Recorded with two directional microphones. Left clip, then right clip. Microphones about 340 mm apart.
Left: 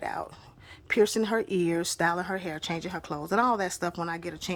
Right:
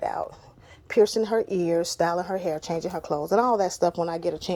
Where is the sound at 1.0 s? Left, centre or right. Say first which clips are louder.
Right 4 dB; left.